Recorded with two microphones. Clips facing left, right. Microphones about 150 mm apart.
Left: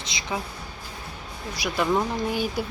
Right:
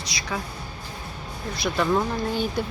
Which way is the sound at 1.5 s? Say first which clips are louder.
Right 1 dB; 10° left (ahead or behind).